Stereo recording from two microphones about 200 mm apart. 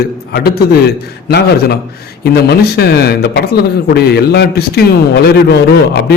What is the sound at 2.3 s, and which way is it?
A man's voice, 55° left (ahead or behind).